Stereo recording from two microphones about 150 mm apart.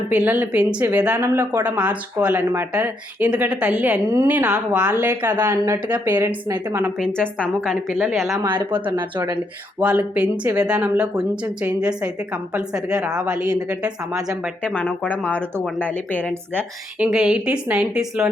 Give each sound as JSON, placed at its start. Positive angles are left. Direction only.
{"t": 0.1, "sound": "speech", "side_deg": -10}
{"t": 6.9, "sound": "a woman's voice", "side_deg": 5}
{"t": 8.4, "sound": "a woman's voice", "side_deg": -15}
{"t": 14.6, "sound": "speech", "side_deg": 10}
{"t": 17.0, "sound": "a woman's voice", "side_deg": -5}